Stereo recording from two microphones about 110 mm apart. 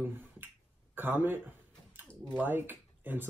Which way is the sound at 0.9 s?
20° right (ahead or behind).